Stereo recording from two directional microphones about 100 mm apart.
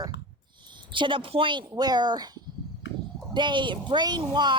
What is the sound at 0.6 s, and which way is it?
Speech, 50° right (ahead or behind).